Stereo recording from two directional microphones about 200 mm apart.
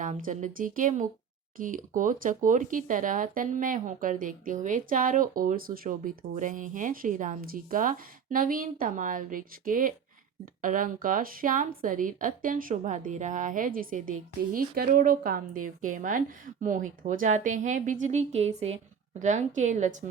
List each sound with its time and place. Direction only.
0.0 s speech: 40° right (ahead or behind)